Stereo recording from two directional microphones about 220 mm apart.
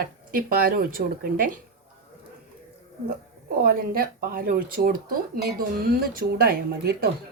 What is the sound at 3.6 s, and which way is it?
Speech, 40° right (ahead or behind).